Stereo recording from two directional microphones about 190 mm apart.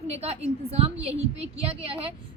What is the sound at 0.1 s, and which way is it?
A woman's voice, 30° right (ahead or behind).